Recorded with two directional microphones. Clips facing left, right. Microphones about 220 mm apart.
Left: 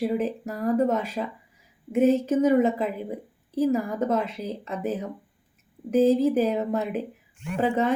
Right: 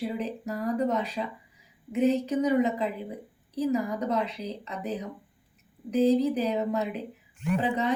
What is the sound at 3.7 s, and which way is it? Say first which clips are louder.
A woman's voice: even; 50° left (ahead or behind).